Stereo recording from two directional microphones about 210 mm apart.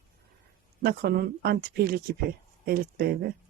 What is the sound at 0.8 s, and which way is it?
Speech, 45° right (ahead or behind).